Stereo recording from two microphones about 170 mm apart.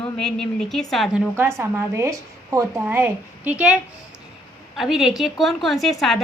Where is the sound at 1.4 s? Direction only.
15° right (ahead or behind).